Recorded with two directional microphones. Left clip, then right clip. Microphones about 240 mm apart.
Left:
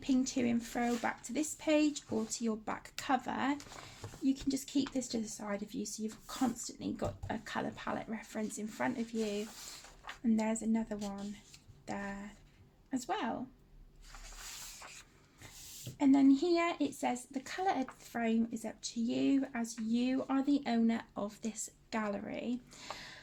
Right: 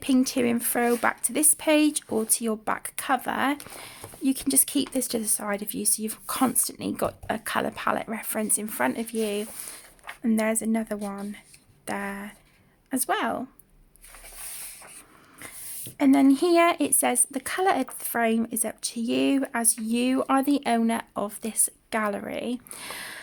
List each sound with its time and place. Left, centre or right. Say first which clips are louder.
0.0 s speech: right 10 dB; right
16.0 s speech: right 8 dB; right